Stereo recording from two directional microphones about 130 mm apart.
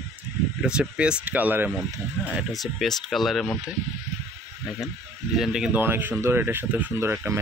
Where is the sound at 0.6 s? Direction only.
5° right (ahead or behind).